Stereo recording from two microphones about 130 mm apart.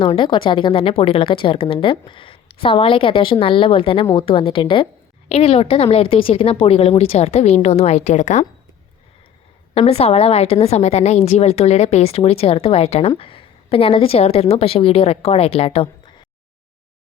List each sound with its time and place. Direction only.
0.0 s a woman's voice: 40° left (ahead or behind); by 8.4 s 65° left (ahead or behind)
9.7 s a woman's voice: 50° left (ahead or behind)